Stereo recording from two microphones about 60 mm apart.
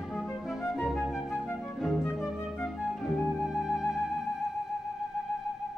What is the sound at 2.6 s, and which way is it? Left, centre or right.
Music, centre.